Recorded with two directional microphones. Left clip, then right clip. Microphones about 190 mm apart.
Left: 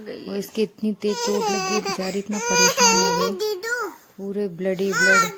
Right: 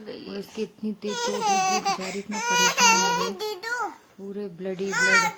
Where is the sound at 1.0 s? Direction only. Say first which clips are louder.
Left 3 dB; 5° right (ahead or behind).